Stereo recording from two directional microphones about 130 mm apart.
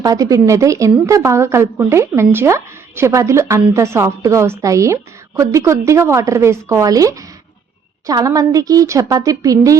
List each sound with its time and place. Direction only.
0.0 s a woman's voice: 25° right (ahead or behind)